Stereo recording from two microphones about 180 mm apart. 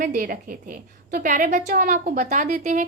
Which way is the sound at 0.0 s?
50° right (ahead or behind).